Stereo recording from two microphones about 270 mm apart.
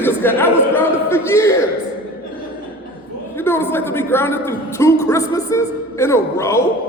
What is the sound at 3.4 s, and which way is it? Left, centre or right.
A man's voice, centre.